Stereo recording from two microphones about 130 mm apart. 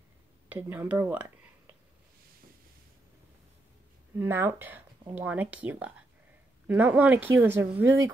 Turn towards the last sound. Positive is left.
turn(degrees=-15)  # may be behind; listen again after turning